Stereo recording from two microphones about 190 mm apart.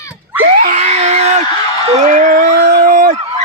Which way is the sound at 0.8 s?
35° right (ahead or behind).